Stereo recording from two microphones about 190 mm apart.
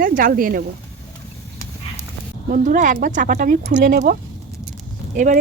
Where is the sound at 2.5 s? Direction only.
40° right (ahead or behind).